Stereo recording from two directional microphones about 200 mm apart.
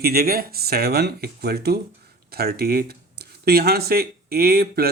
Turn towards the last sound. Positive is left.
turn(degrees=-50)  # may be behind; listen again after turning